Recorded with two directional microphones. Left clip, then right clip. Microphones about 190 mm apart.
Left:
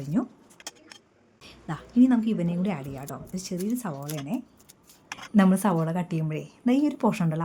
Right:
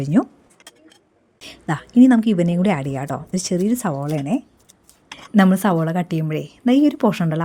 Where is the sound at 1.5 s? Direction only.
40° right (ahead or behind).